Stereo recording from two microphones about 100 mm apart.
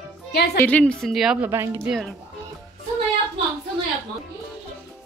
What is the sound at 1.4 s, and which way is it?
Speech, 25° right (ahead or behind).